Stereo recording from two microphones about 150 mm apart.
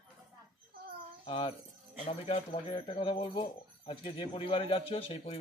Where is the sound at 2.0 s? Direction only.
40° left (ahead or behind).